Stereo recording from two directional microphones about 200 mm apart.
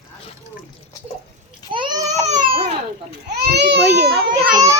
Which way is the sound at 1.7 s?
20° right (ahead or behind).